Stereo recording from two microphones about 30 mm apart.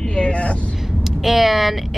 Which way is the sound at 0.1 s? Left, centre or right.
Left.